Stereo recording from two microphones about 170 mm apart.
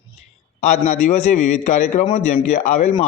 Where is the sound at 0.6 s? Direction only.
45° left (ahead or behind).